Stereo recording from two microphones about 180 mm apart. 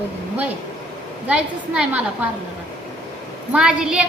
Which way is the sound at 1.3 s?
5° right (ahead or behind).